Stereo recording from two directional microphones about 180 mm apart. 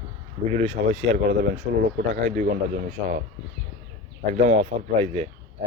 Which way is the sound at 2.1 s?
40° right (ahead or behind).